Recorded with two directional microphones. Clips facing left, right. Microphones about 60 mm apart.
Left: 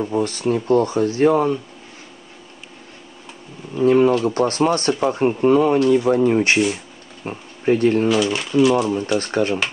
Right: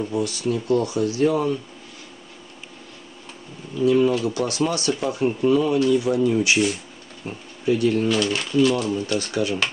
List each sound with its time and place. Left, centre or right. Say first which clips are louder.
0.0 s speech: left 4 dB; left
3.7 s speech: left 4 dB; left
8.1 s speech: left 3 dB; centre
9.2 s speech: left 4 dB; left